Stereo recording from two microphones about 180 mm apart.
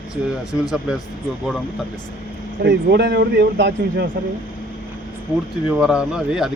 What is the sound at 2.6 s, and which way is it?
Speech, 70° right (ahead or behind).